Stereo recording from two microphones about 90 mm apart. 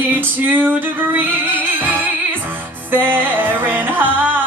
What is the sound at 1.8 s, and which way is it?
Music, 20° right (ahead or behind).